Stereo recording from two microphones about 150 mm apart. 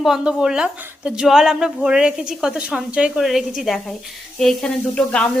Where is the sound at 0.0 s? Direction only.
5° right (ahead or behind).